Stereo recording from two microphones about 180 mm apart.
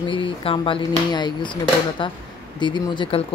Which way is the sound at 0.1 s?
30° left (ahead or behind).